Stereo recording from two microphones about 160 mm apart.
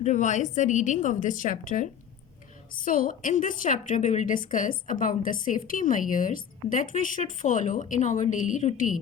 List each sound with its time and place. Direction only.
0.0 s a woman's voice: 45° left (ahead or behind)